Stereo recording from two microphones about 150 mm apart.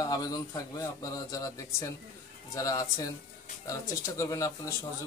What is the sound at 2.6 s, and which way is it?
Speech, 20° left (ahead or behind).